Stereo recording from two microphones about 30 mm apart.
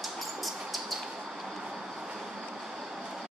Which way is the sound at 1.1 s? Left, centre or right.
Right.